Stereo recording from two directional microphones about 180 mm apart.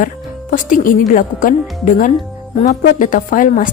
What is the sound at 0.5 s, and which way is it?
Speech, 50° left (ahead or behind).